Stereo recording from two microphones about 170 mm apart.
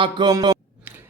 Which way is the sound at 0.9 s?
10° right (ahead or behind).